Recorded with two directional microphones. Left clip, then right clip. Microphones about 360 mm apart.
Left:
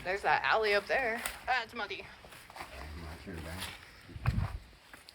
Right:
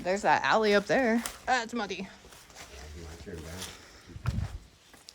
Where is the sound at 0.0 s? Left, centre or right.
Right.